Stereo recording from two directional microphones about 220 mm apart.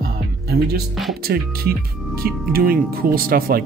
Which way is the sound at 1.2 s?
45° right (ahead or behind).